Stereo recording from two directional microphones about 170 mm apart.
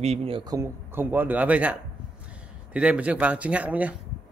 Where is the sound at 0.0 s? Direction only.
35° right (ahead or behind).